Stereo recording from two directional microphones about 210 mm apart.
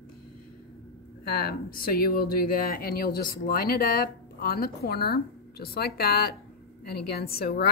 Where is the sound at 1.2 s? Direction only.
45° left (ahead or behind).